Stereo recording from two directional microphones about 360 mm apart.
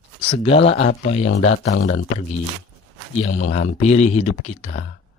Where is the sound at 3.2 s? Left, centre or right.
Centre.